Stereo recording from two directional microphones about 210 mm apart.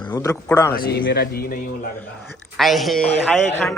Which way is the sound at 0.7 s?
50° left (ahead or behind).